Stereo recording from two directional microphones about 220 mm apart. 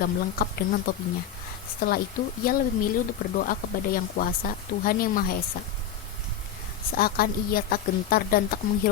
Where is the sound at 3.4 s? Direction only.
40° left (ahead or behind).